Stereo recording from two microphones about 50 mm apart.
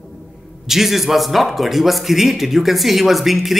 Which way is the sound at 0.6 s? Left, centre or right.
Centre.